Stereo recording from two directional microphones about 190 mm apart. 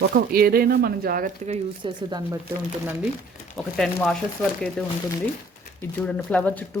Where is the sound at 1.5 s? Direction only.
25° right (ahead or behind).